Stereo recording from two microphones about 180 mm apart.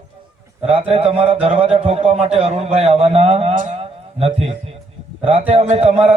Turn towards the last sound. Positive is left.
turn(degrees=-35)  # may be behind; listen again after turning